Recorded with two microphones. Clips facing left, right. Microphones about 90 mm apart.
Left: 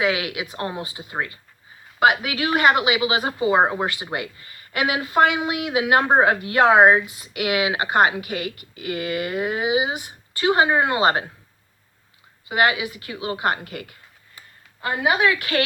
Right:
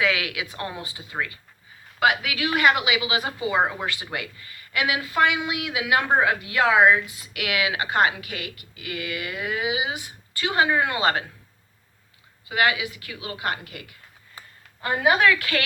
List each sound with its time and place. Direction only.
0.0 s a woman's voice: 30° left (ahead or behind)
7.1 s a woman's voice: 25° left (ahead or behind)
12.5 s a woman's voice: 25° left (ahead or behind)
14.8 s a woman's voice: 5° left (ahead or behind)
15.2 s a woman's voice: 25° left (ahead or behind)